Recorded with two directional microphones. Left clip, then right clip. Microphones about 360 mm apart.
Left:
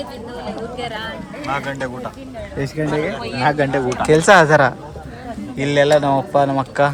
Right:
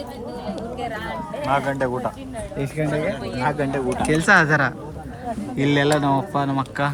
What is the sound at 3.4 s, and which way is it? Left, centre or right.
Speech, left.